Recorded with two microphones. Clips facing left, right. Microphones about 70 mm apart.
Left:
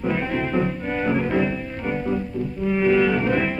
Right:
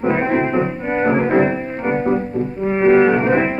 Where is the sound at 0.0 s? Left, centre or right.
Right.